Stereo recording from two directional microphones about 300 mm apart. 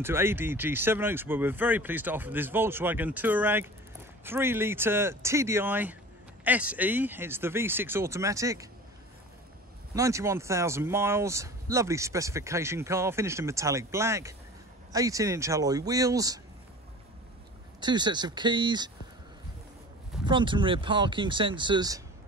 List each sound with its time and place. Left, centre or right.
0.0 s speech: centre
9.9 s speech: centre
17.7 s speech: centre
20.2 s speech: centre